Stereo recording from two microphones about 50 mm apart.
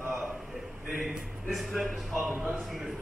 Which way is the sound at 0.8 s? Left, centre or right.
Centre.